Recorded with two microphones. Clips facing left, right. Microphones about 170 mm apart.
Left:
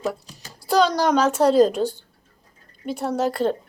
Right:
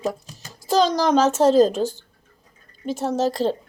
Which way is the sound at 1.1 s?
25° right (ahead or behind).